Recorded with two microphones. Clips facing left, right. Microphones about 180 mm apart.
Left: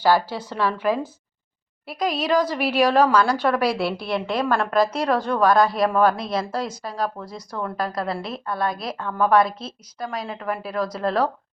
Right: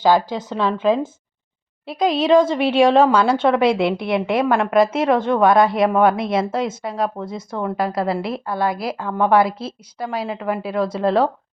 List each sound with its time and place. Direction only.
0.0 s a woman's voice: 20° right (ahead or behind)